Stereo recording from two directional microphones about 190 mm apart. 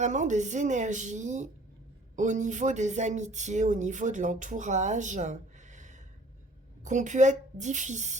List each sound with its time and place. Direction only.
0.0 s speech: 40° right (ahead or behind)